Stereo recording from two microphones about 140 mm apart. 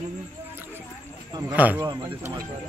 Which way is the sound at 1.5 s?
10° right (ahead or behind).